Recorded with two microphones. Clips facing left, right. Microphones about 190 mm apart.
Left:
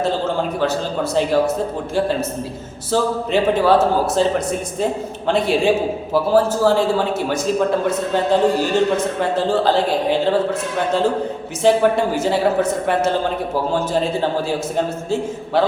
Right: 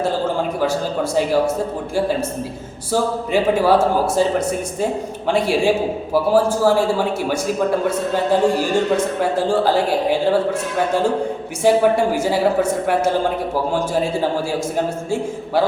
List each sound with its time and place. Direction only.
2.9 s a man's voice: 10° right (ahead or behind)
7.9 s a man's voice: 10° right (ahead or behind)
11.6 s a man's voice: 10° right (ahead or behind)